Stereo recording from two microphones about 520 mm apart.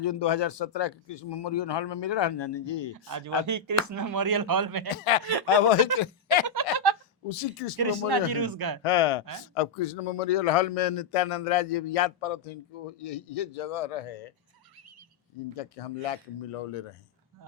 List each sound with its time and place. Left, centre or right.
0.0 s speech: left
2.9 s speech: right
4.9 s speech: left
6.4 s a sound: right
7.3 s a man's voice: left
7.8 s speech: right
8.8 s speech: left
9.6 s a man's voice: left
15.5 s a man's voice: left